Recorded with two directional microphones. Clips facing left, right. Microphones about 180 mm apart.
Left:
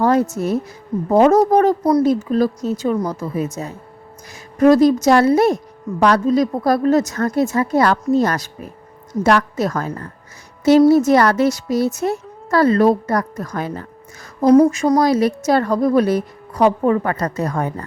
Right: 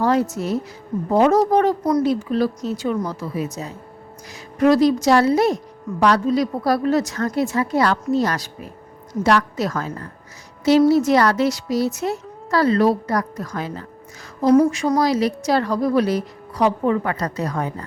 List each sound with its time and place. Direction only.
0.0 s music: 50° left (ahead or behind)
0.3 s a woman's voice: 50° left (ahead or behind)
14.4 s a woman's voice: 40° left (ahead or behind)